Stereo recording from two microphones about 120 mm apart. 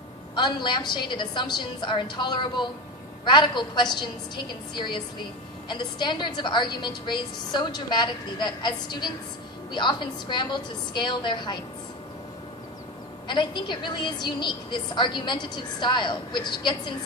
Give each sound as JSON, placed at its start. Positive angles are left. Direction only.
{"t": 0.3, "sound": "a woman's voice", "side_deg": 40}
{"t": 13.2, "sound": "a woman's voice", "side_deg": 40}